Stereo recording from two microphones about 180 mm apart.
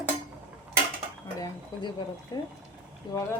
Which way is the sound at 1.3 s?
25° left (ahead or behind).